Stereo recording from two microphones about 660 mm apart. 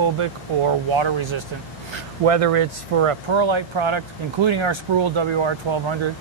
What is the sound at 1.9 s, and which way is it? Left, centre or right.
Speech, right.